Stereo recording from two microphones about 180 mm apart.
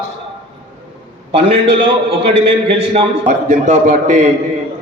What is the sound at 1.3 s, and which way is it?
A man's voice, 30° right (ahead or behind).